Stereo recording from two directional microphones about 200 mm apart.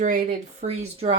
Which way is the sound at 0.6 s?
30° right (ahead or behind).